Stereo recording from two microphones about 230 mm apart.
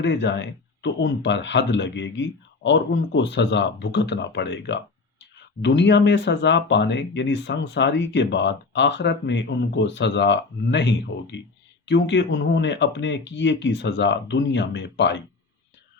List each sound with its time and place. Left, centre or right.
0.0 s speech: left